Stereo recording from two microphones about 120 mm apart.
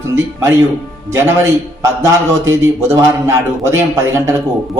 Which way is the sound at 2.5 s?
25° right (ahead or behind).